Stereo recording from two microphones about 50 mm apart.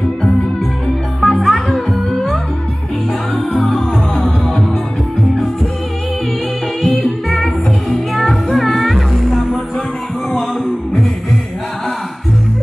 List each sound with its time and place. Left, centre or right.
0.8 s music: centre
7.2 s music: centre